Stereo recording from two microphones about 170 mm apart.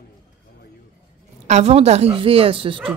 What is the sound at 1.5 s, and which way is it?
A woman's voice, 40° right (ahead or behind).